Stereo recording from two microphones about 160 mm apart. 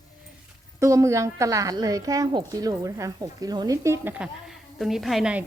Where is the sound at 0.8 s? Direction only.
20° right (ahead or behind).